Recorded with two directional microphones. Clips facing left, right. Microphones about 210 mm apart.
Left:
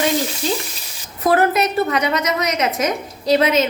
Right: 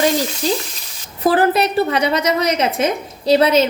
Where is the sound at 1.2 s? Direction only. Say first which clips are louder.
Right 1 dB; 30° right (ahead or behind).